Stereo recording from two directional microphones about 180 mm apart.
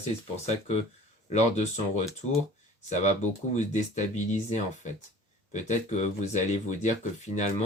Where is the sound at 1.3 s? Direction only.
40° left (ahead or behind).